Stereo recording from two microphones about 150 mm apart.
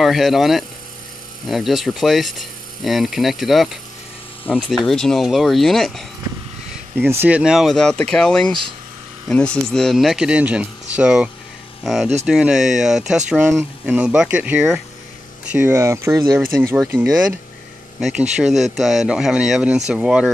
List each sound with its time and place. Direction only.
0.0 s speech: centre (ahead or behind)
7.0 s speech: 10° right (ahead or behind)
18.0 s speech: 5° right (ahead or behind)